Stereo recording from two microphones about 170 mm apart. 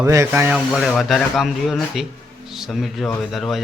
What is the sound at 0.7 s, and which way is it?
Speech, centre (ahead or behind).